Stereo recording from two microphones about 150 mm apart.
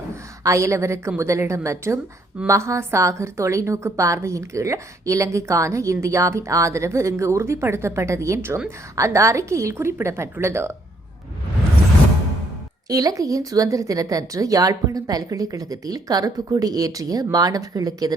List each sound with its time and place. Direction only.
0.4 s a woman's voice: 20° right (ahead or behind)
12.9 s a woman's voice: 20° right (ahead or behind)